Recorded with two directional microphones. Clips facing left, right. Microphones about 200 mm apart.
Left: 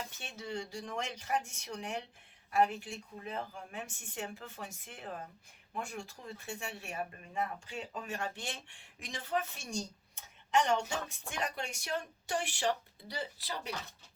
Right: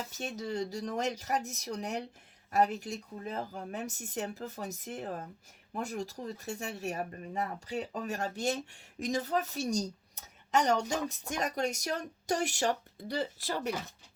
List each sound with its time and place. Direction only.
0.1 s speech: 40° right (ahead or behind)